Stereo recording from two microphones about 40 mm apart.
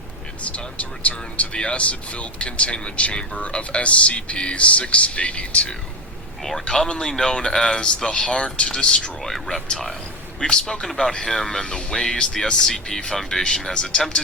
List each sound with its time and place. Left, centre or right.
0.4 s speech: left
6.4 s speech: centre
6.8 s speech: left